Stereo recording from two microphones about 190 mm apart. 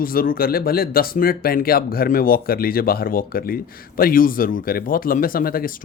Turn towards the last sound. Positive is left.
turn(degrees=50)  # may be behind; listen again after turning